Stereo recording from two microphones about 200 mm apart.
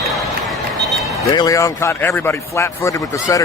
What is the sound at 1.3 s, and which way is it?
Speech, 20° left (ahead or behind).